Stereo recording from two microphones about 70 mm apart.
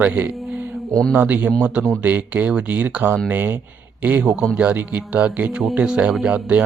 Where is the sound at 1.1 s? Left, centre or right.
Right.